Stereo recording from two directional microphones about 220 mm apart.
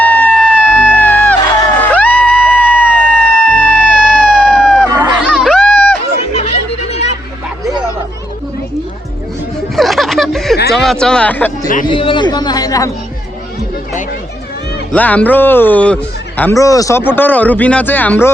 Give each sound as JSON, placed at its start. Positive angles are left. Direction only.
{"t": 0.0, "sound": "music", "side_deg": 10}
{"t": 1.8, "sound": "a sound", "side_deg": 5}
{"t": 6.3, "sound": "music", "side_deg": 30}
{"t": 9.7, "sound": "a sound", "side_deg": 0}
{"t": 11.0, "sound": "speech", "side_deg": 5}
{"t": 11.9, "sound": "speech", "side_deg": 20}
{"t": 14.9, "sound": "speech", "side_deg": 5}